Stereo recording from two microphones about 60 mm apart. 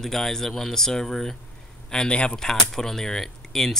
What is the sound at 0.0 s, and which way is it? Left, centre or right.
Speech, centre.